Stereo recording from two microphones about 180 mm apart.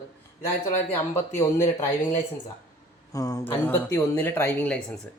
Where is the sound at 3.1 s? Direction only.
20° left (ahead or behind).